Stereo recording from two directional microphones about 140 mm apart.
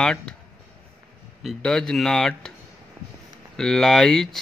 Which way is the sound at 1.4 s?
5° left (ahead or behind).